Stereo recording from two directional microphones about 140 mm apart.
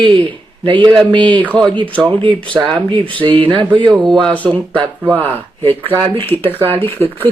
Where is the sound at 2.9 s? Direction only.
35° right (ahead or behind).